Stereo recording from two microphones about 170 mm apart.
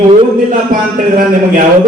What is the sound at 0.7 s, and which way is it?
Speech, 55° right (ahead or behind).